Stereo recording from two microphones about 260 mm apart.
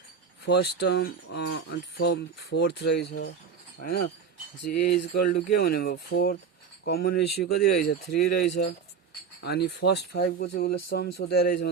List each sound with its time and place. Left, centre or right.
0.4 s speech: left